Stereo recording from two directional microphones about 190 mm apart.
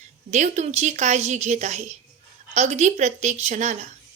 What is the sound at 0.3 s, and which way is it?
A woman's voice, 40° right (ahead or behind).